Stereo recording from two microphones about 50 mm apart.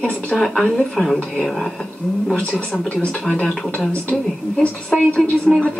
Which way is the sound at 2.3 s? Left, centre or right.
Left.